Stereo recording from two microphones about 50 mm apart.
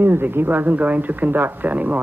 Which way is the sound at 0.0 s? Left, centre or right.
Right.